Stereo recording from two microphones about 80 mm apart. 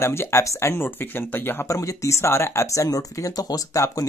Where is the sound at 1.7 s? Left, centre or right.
Left.